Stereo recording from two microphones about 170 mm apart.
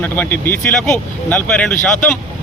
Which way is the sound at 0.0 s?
10° left (ahead or behind).